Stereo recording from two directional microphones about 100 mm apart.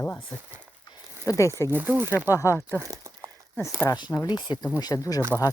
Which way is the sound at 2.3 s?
30° left (ahead or behind).